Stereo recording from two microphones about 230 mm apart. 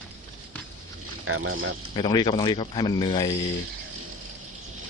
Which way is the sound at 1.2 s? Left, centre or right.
Right.